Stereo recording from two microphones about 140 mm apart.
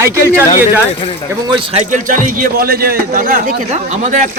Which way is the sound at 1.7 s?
70° right (ahead or behind).